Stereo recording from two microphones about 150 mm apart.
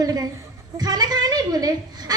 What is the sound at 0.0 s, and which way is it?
Speech, 25° right (ahead or behind).